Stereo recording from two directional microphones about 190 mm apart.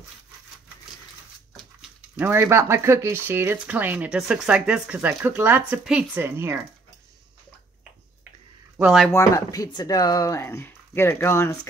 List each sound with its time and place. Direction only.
1.8 s speech: 10° right (ahead or behind)
8.7 s speech: 5° right (ahead or behind)
9.1 s speech: 15° left (ahead or behind)